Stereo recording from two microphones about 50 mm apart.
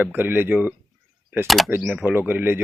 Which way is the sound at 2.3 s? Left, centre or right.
Right.